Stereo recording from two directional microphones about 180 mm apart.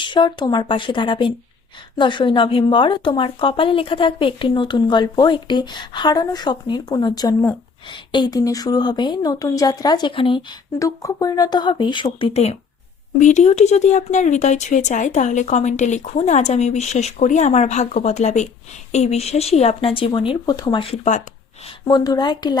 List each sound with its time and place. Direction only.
0.0 s a woman's voice: 25° left (ahead or behind)
20.9 s speech: 40° left (ahead or behind)
21.7 s a woman's voice: 25° left (ahead or behind)